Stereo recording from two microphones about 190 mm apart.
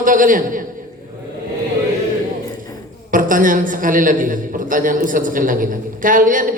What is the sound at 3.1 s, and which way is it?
A woman's voice, 45° right (ahead or behind).